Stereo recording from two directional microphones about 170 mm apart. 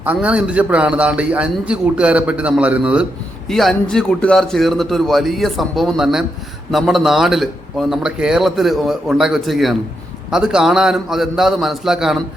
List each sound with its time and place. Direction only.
0.0 s a man's voice: 10° right (ahead or behind)